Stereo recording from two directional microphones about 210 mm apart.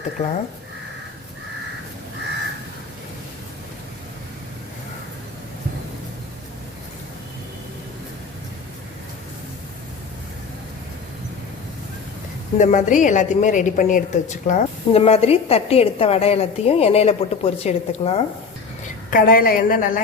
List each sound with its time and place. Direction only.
0.2 s a woman's voice: 30° left (ahead or behind)
12.5 s a woman's voice: 35° left (ahead or behind)
19.1 s a woman's voice: 45° left (ahead or behind)